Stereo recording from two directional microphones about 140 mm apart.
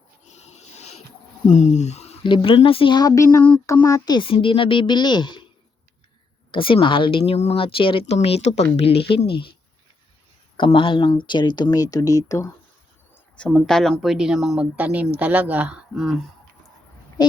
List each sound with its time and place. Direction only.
0.3 s a sound: 55° left (ahead or behind)
1.5 s speech: 55° left (ahead or behind)
2.2 s speech: 35° left (ahead or behind)
6.5 s speech: 40° left (ahead or behind)
10.6 s speech: 35° left (ahead or behind)
13.3 s speech: 5° left (ahead or behind)